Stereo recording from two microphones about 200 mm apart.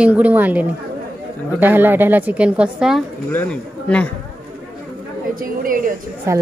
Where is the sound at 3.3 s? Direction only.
10° left (ahead or behind).